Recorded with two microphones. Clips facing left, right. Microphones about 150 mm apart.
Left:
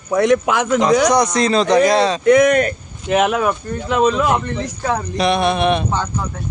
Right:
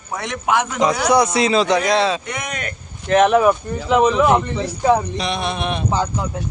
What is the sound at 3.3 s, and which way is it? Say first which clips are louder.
Speech: right 4 dB; 5° right (ahead or behind).